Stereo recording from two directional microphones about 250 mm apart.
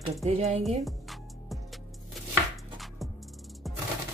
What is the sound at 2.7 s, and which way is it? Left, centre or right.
Music, centre.